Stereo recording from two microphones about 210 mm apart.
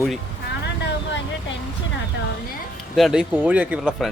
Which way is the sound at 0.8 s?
55° left (ahead or behind).